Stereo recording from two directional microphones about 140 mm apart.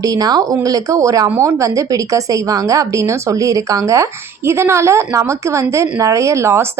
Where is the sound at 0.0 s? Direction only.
25° right (ahead or behind).